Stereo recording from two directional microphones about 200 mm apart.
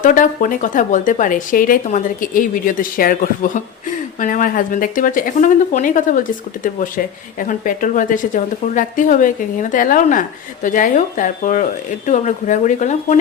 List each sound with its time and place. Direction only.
0.0 s speech: 40° left (ahead or behind)